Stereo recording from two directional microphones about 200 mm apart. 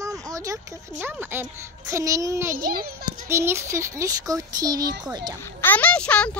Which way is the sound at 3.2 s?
15° right (ahead or behind).